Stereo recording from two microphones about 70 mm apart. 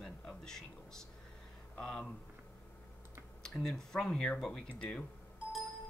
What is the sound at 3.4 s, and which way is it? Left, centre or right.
Speech, centre.